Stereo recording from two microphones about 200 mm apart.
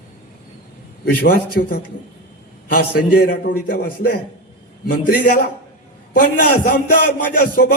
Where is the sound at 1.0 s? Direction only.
45° left (ahead or behind).